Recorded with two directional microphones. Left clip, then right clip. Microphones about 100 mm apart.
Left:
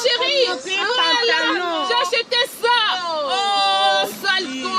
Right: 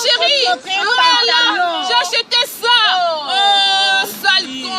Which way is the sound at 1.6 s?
40° right (ahead or behind).